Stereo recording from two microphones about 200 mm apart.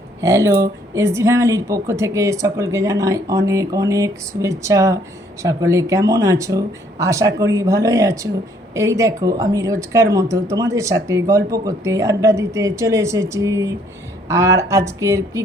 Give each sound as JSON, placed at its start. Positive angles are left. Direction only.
{"t": 0.2, "sound": "speech", "side_deg": -15}